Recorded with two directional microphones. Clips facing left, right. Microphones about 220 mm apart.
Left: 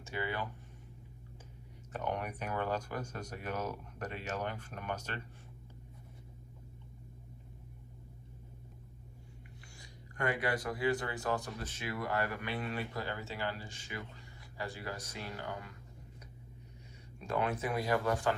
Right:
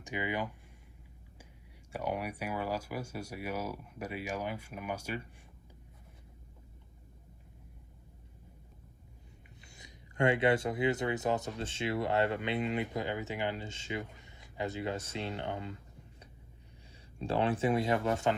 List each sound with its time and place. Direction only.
0.0 s speech: 15° right (ahead or behind)
1.9 s speech: 10° right (ahead or behind)
9.6 s speech: 20° right (ahead or behind)
17.2 s speech: 30° right (ahead or behind)